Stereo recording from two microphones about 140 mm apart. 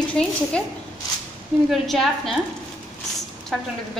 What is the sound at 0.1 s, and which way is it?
Speech, 5° left (ahead or behind).